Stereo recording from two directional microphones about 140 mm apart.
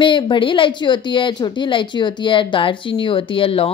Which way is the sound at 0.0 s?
35° left (ahead or behind).